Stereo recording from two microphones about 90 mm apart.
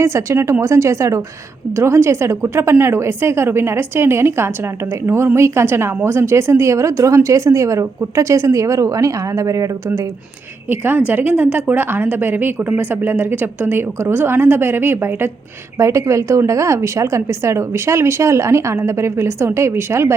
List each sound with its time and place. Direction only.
0.0 s a woman's voice: 30° right (ahead or behind)
10.7 s a woman's voice: 20° right (ahead or behind)